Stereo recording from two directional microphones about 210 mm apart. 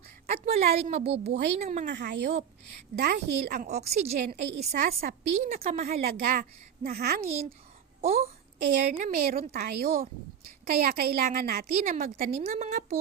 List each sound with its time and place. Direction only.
0.3 s a woman's voice: 30° right (ahead or behind)
1.9 s a woman's voice: 50° right (ahead or behind); by 4.0 s 30° right (ahead or behind)
4.3 s a woman's voice: 50° right (ahead or behind)
8.2 s a woman's voice: 40° right (ahead or behind)
12.4 s a woman's voice: 30° right (ahead or behind)